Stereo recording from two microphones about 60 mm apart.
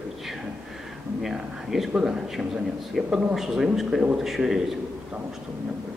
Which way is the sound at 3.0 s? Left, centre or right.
Centre.